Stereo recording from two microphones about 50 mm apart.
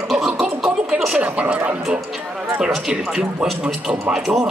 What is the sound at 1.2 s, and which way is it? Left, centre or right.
Speech, right.